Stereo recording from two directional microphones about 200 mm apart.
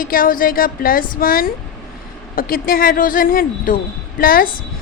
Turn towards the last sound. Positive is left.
turn(degrees=45)  # may be behind; listen again after turning